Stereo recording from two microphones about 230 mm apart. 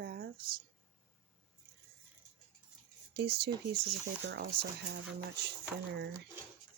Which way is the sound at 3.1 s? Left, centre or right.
Right.